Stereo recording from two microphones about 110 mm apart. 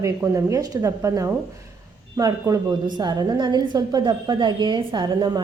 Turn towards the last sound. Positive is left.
turn(degrees=-40)  # may be behind; listen again after turning